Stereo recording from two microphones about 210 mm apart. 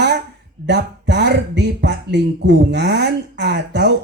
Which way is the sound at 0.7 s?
55° right (ahead or behind).